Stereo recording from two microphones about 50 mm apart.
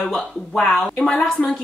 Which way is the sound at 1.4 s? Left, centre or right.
Centre.